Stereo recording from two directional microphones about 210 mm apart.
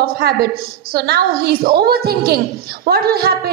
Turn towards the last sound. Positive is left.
turn(degrees=-50)  # may be behind; listen again after turning